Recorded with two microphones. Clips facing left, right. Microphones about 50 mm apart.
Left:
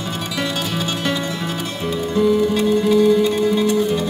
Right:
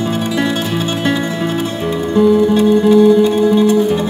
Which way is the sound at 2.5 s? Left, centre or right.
Right.